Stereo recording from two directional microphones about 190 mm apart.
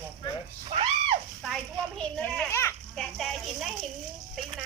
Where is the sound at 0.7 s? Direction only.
30° right (ahead or behind).